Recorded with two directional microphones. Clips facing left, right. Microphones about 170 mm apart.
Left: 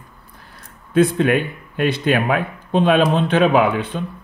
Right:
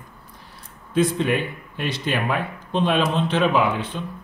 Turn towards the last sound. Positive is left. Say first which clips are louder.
# left 5 dB
turn(degrees=55)  # may be behind; listen again after turning